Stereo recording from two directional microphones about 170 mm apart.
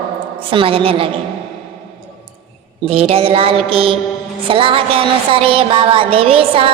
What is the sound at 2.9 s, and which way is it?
A woman's voice, 35° right (ahead or behind).